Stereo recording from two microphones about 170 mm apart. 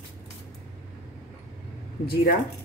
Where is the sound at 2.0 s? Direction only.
65° left (ahead or behind).